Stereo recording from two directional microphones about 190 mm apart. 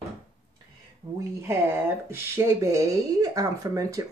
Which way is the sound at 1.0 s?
35° right (ahead or behind).